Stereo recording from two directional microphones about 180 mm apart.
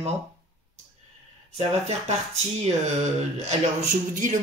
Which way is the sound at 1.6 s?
40° right (ahead or behind).